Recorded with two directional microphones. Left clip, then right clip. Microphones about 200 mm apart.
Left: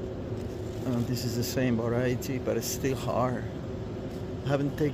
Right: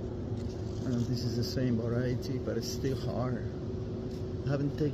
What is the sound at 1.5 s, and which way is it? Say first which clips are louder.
Speech: left 6 dB; 20° left (ahead or behind).